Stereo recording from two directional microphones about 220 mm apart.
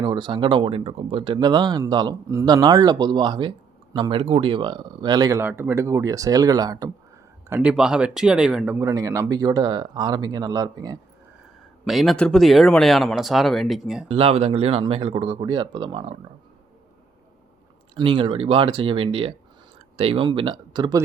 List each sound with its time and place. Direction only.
0.0 s speech: 20° right (ahead or behind)
7.5 s speech: 5° right (ahead or behind)
11.9 s speech: centre (ahead or behind)
14.1 s speech: 25° right (ahead or behind)
17.9 s speech: 25° right (ahead or behind)